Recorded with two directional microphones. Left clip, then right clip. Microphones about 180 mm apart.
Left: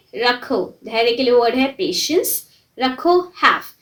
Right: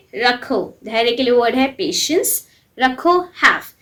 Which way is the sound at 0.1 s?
25° right (ahead or behind).